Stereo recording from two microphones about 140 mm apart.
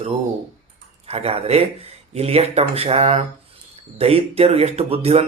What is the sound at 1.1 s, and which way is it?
A man's voice, 45° right (ahead or behind).